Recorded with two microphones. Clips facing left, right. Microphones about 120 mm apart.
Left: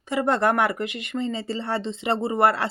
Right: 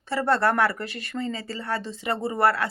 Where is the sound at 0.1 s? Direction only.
15° left (ahead or behind).